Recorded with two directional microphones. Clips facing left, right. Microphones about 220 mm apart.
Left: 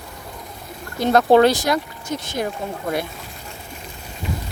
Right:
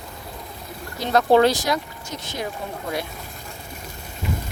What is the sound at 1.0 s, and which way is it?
Speech, 50° left (ahead or behind).